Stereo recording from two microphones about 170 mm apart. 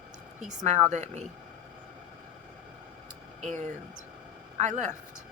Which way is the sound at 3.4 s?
45° right (ahead or behind).